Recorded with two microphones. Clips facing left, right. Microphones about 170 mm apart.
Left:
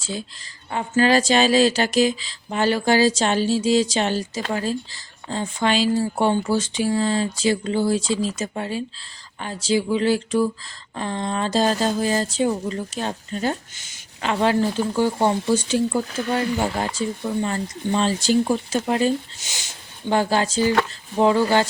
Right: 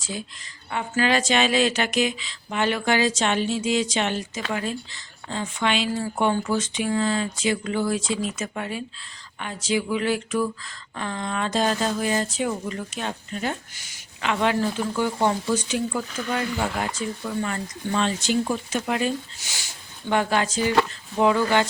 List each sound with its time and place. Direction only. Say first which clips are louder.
0.7 s speech: left 4 dB; 35° left (ahead or behind)
13.7 s a woman's voice: even; 25° left (ahead or behind)
14.2 s speech: left 3 dB; 35° left (ahead or behind)
19.4 s speech: left 1 dB; 20° left (ahead or behind)
20.1 s speech: left 2 dB; 30° left (ahead or behind)